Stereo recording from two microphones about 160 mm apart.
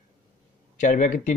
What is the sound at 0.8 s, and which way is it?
Speech, 55° left (ahead or behind).